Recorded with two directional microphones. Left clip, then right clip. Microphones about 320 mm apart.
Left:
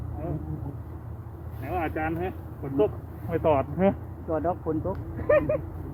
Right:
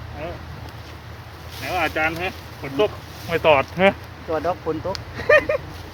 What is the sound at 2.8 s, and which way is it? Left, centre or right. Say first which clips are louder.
Speech: right 5 dB; right.